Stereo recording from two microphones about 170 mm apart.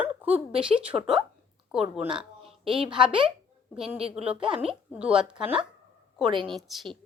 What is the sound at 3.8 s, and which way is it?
Speech, 35° right (ahead or behind).